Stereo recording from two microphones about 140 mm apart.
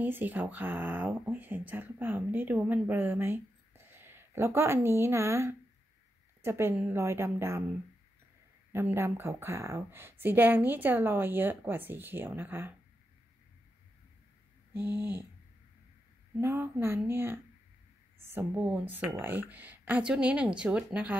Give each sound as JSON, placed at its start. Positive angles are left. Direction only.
{"t": 0.0, "sound": "speech", "side_deg": -15}
{"t": 8.7, "sound": "speech", "side_deg": -15}
{"t": 14.7, "sound": "speech", "side_deg": -15}
{"t": 16.3, "sound": "speech", "side_deg": -15}
{"t": 18.5, "sound": "speech", "side_deg": -15}